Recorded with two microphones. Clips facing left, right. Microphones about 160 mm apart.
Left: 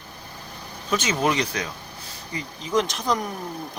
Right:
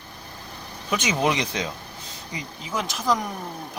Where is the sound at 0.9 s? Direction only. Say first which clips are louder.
Even; 10° right (ahead or behind).